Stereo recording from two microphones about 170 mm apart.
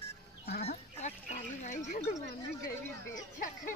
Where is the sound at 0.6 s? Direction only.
45° left (ahead or behind).